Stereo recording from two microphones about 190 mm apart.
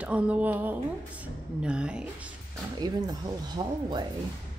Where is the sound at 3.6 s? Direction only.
20° right (ahead or behind).